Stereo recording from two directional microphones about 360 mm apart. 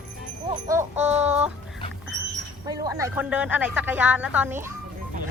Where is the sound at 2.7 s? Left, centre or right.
Centre.